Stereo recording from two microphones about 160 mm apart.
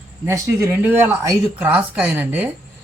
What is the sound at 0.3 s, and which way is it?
Speech, 20° right (ahead or behind).